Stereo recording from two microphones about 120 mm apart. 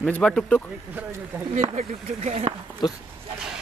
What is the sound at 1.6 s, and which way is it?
Speech, 65° right (ahead or behind).